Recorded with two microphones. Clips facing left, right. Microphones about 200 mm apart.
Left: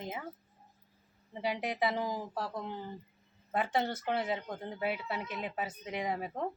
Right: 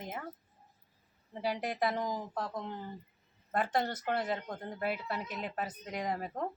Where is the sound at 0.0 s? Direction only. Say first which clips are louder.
Left 1 dB; 5° left (ahead or behind).